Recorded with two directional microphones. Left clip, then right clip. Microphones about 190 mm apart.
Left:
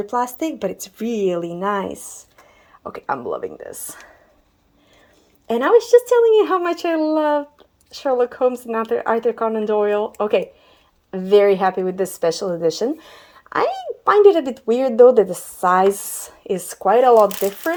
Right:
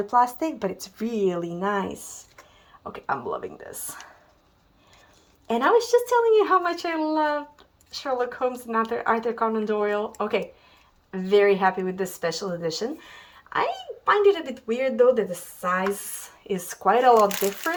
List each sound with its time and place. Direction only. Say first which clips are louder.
0.1 s a woman's voice: right 2 dB; 20° left (ahead or behind)
5.5 s a woman's voice: left 6 dB; 15° left (ahead or behind)
16.5 s a woman's voice: left 5 dB; 20° left (ahead or behind)